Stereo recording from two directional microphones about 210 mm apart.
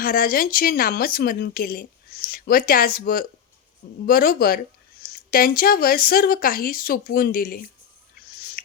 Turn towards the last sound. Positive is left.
turn(degrees=45)  # may be behind; listen again after turning